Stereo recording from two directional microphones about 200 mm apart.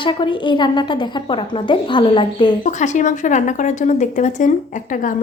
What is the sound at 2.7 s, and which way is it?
Speech, 35° left (ahead or behind).